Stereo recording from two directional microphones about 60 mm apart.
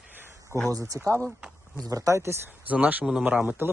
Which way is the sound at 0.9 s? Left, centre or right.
Right.